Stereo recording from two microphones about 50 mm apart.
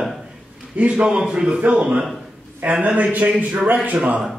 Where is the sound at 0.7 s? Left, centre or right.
Right.